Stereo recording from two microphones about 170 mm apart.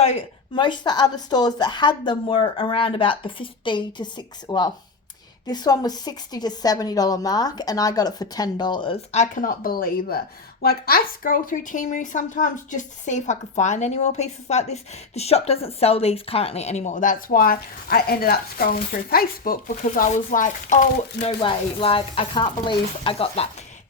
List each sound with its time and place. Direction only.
0.0 s a woman's voice: 35° left (ahead or behind)
21.2 s speech: 35° left (ahead or behind)